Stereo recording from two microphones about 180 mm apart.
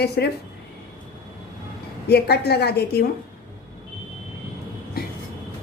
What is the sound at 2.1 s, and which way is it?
Speech, 65° left (ahead or behind).